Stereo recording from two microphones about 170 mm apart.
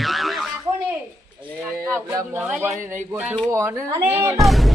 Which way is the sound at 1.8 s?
15° right (ahead or behind).